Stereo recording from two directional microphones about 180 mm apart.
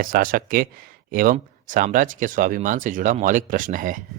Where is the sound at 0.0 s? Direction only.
50° right (ahead or behind).